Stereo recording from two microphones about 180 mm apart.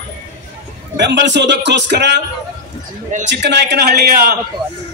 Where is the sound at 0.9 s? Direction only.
75° right (ahead or behind).